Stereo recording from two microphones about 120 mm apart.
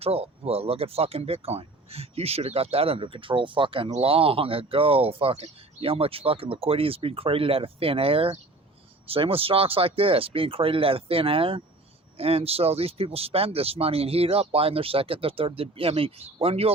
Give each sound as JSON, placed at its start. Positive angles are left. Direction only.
{"t": 0.0, "sound": "speech", "side_deg": -55}